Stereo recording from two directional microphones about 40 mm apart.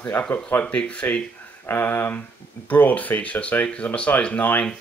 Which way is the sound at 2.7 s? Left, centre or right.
Left.